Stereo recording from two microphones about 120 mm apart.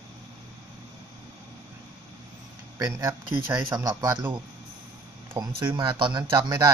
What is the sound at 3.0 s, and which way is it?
Speech, 35° right (ahead or behind).